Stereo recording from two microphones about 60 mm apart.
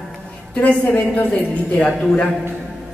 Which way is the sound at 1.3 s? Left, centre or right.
Left.